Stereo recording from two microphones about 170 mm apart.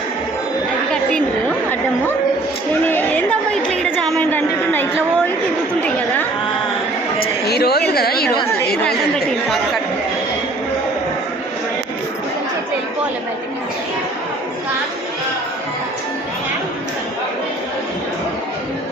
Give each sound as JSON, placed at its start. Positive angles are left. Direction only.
{"t": 2.8, "sound": "chatter", "side_deg": 10}
{"t": 3.7, "sound": "a sound", "side_deg": 5}
{"t": 7.4, "sound": "a woman's voice", "side_deg": 70}